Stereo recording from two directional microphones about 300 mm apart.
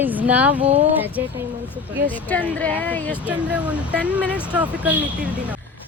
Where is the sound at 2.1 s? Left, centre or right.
Centre.